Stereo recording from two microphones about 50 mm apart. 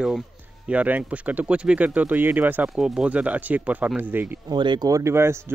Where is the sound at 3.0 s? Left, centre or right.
Right.